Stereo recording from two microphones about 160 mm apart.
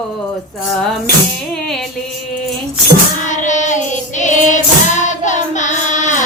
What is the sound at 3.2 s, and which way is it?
Child singing, 50° left (ahead or behind).